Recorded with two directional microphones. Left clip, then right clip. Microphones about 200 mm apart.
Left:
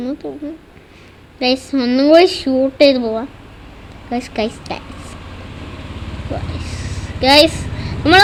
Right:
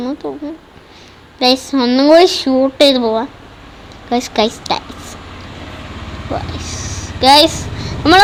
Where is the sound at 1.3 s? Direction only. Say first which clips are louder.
Right 4 dB; 5° left (ahead or behind).